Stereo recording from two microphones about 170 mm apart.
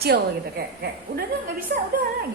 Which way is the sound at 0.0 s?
65° right (ahead or behind).